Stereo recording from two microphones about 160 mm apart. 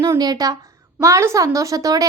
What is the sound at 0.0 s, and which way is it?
A woman's voice, 20° right (ahead or behind).